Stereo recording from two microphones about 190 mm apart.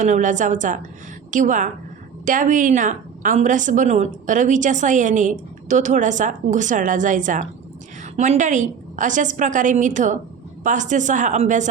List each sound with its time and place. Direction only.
0.0 s a woman's voice: 40° right (ahead or behind)